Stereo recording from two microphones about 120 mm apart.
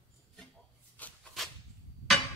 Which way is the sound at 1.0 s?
15° left (ahead or behind).